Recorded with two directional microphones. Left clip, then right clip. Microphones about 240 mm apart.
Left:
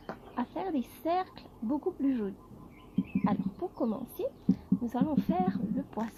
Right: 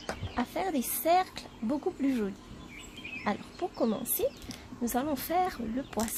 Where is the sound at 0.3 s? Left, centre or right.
Right.